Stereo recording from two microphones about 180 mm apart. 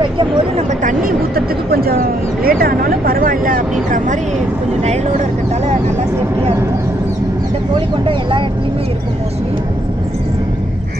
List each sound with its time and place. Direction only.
0.6 s speech: 45° right (ahead or behind)
8.1 s speech: 30° right (ahead or behind)